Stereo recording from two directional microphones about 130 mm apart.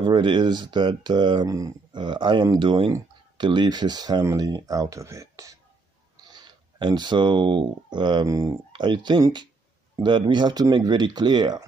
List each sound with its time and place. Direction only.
0.0 s speech: 35° right (ahead or behind)